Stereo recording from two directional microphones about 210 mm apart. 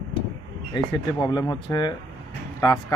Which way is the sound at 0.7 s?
20° left (ahead or behind).